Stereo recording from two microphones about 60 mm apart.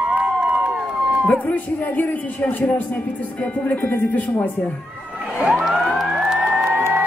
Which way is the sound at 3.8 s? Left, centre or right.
Left.